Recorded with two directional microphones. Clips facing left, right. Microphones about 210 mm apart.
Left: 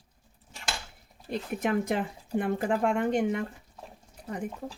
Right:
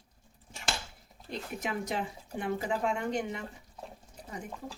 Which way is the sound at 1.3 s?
55° left (ahead or behind).